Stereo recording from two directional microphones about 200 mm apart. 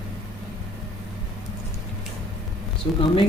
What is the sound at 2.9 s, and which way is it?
Speech, 25° left (ahead or behind).